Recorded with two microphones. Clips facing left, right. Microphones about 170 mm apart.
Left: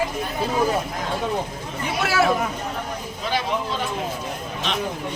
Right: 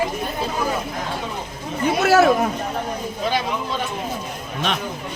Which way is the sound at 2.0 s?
45° right (ahead or behind).